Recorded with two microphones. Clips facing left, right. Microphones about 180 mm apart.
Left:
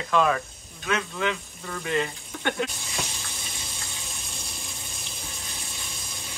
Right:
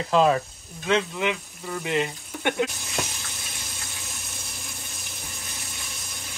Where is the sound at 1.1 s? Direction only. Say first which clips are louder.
Right 1 dB; 15° right (ahead or behind).